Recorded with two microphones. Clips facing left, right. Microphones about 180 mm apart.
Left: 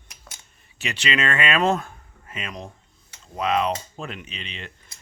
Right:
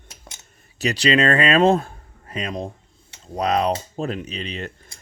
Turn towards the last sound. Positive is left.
turn(degrees=-45)  # may be behind; listen again after turning